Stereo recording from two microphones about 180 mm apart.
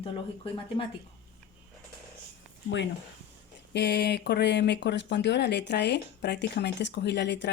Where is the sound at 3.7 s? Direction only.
70° left (ahead or behind).